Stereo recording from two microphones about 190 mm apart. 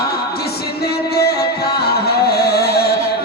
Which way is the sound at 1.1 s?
55° left (ahead or behind).